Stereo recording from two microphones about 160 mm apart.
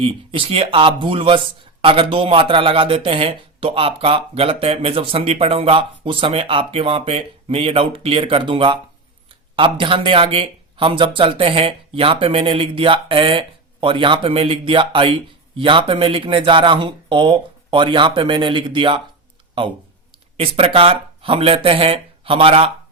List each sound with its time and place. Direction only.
0.0 s speech: 35° right (ahead or behind)
20.3 s speech: 35° right (ahead or behind)